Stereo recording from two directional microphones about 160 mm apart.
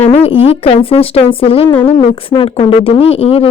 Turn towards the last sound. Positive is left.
turn(degrees=40)  # may be behind; listen again after turning